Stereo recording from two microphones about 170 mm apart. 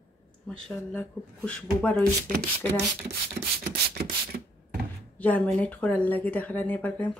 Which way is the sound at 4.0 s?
65° right (ahead or behind).